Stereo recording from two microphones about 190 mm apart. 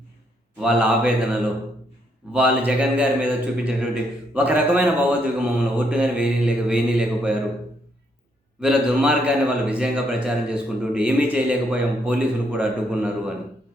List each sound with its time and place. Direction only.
0.6 s mantra: 5° right (ahead or behind)
2.3 s a man's voice: 5° right (ahead or behind)
5.5 s mantra: 5° right (ahead or behind)
8.6 s a man's voice: 5° right (ahead or behind)